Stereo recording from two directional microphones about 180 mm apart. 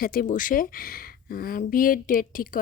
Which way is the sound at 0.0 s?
50° left (ahead or behind).